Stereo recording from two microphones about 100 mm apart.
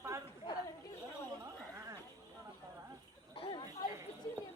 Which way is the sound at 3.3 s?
60° left (ahead or behind).